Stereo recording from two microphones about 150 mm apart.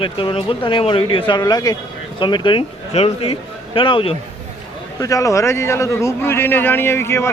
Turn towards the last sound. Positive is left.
turn(degrees=15)  # may be behind; listen again after turning